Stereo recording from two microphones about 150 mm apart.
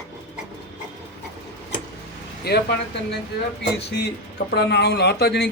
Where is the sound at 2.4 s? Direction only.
90° left.